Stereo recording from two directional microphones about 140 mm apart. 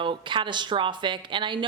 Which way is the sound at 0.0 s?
35° right (ahead or behind).